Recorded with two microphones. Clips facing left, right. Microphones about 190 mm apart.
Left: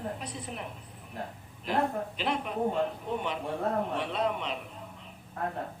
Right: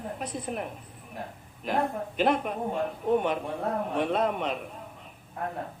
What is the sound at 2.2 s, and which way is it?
Speech, 50° right (ahead or behind).